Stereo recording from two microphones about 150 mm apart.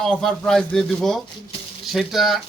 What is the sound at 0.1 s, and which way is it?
Speech, 5° left (ahead or behind).